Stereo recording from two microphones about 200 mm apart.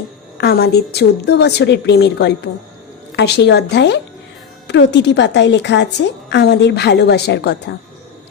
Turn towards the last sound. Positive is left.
turn(degrees=55)  # may be behind; listen again after turning